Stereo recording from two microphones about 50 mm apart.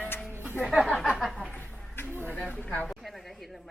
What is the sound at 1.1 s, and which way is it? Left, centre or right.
Speech, centre.